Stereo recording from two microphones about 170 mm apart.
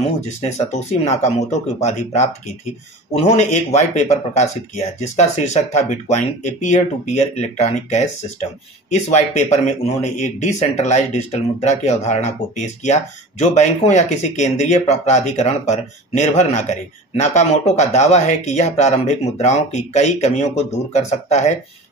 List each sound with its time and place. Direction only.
0.0 s speech: 40° left (ahead or behind)